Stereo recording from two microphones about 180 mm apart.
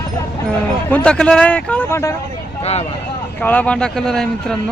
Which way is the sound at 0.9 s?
5° left (ahead or behind).